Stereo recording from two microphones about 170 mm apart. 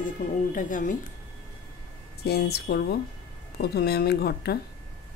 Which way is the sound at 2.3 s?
70° left (ahead or behind).